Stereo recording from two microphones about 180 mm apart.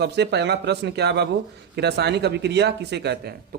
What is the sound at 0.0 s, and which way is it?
Speech, 70° right (ahead or behind).